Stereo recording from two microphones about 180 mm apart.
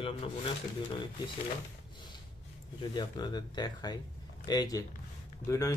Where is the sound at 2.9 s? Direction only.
25° left (ahead or behind).